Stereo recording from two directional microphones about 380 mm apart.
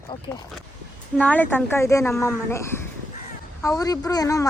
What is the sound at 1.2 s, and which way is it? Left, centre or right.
A woman's voice, centre.